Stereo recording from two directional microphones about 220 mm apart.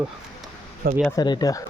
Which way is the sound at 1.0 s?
20° left (ahead or behind).